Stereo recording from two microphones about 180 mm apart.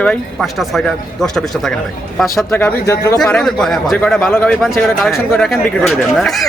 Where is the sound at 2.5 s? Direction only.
15° left (ahead or behind).